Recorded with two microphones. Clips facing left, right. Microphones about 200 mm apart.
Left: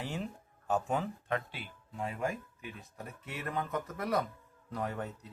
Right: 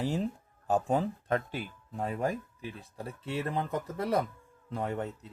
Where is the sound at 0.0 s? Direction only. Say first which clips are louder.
Right 7 dB; 35° right (ahead or behind).